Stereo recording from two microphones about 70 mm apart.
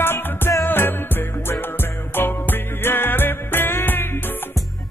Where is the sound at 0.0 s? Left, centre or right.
Left.